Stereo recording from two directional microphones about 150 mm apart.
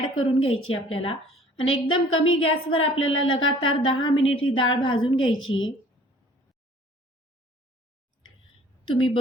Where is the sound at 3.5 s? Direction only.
35° left (ahead or behind).